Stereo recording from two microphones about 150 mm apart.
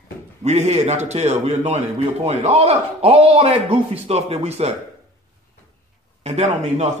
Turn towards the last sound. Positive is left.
turn(degrees=-45)  # may be behind; listen again after turning